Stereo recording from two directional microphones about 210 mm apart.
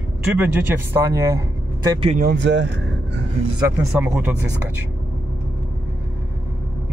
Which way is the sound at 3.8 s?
10° right (ahead or behind).